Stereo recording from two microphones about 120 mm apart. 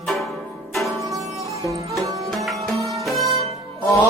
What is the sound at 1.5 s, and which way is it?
Music, 25° right (ahead or behind).